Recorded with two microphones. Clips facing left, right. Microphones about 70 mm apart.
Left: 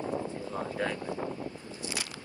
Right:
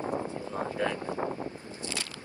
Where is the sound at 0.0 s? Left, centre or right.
Right.